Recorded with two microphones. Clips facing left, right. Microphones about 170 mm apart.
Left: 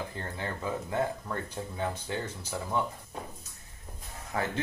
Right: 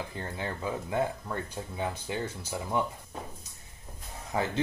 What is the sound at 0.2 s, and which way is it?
Speech, 15° right (ahead or behind).